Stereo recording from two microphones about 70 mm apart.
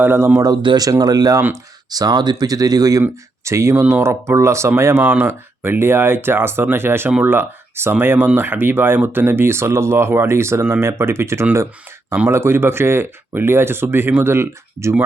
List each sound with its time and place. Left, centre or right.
0.0 s speech: right
0.3 s speech: right
3.4 s speech: right